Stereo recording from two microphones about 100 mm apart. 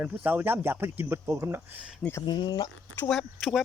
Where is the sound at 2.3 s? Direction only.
45° left (ahead or behind).